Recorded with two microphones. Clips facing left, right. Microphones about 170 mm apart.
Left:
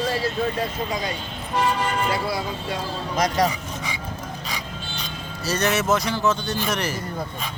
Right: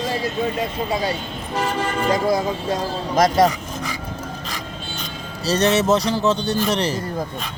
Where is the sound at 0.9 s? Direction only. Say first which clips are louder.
Right 5 dB; 30° right (ahead or behind).